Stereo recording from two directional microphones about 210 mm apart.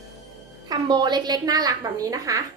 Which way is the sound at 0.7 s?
20° right (ahead or behind).